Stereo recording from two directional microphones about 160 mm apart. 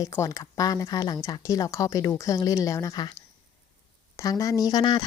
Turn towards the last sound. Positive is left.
turn(degrees=25)  # may be behind; listen again after turning